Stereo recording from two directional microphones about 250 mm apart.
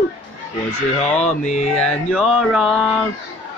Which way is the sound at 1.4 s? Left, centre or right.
Left.